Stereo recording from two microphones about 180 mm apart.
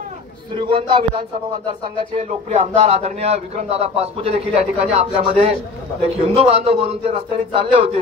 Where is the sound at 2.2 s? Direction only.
40° right (ahead or behind).